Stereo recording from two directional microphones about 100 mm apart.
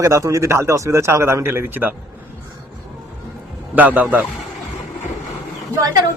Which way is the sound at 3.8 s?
15° right (ahead or behind).